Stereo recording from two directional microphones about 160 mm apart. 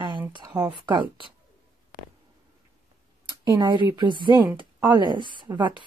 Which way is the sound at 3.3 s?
25° right (ahead or behind).